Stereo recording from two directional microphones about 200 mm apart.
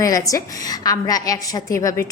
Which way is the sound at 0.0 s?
15° left (ahead or behind).